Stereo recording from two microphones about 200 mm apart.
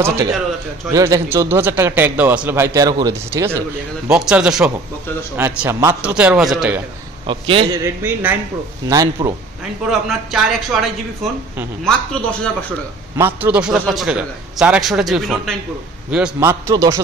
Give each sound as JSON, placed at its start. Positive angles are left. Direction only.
{"t": 0.0, "sound": "a man's voice", "side_deg": -15}
{"t": 7.2, "sound": "a man's voice", "side_deg": -25}
{"t": 7.8, "sound": "a man's voice", "side_deg": -10}
{"t": 9.8, "sound": "a man's voice", "side_deg": 0}
{"t": 13.2, "sound": "a man's voice", "side_deg": -10}